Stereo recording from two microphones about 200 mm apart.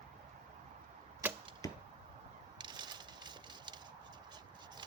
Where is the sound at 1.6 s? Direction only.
15° left (ahead or behind).